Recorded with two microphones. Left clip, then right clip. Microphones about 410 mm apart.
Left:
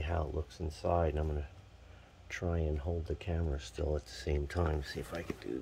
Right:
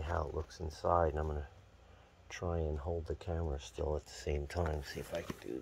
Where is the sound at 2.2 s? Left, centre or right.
Centre.